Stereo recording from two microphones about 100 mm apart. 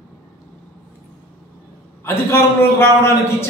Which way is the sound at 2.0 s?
25° left (ahead or behind).